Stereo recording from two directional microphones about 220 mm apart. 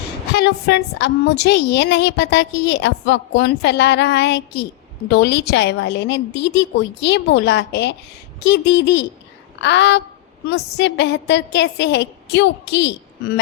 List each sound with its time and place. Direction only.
0.3 s a woman's voice: 50° left (ahead or behind)